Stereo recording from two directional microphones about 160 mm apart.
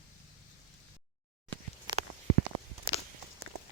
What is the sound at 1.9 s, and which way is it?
Walk, 25° right (ahead or behind).